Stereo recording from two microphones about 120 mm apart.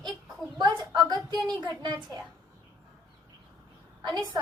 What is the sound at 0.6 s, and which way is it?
Speech, 35° right (ahead or behind).